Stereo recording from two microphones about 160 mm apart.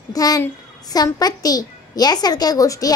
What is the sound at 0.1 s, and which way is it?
A woman's voice, 25° left (ahead or behind).